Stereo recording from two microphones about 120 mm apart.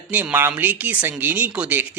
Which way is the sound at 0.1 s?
15° right (ahead or behind).